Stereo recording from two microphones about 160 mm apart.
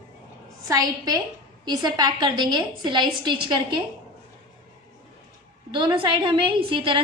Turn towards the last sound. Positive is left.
turn(degrees=-35)  # may be behind; listen again after turning